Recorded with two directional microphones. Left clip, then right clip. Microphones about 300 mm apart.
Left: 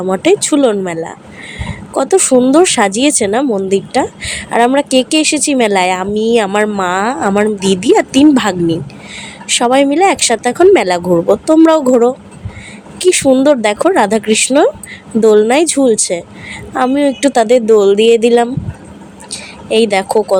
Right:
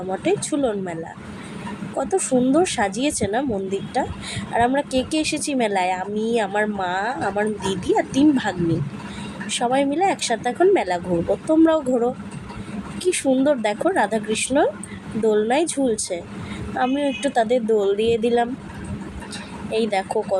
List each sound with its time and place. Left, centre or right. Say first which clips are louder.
0.1 s a woman's voice: left 11 dB; left